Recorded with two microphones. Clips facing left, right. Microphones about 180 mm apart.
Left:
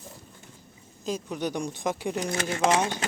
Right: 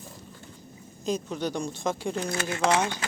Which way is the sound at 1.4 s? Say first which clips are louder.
Even; 15° left (ahead or behind).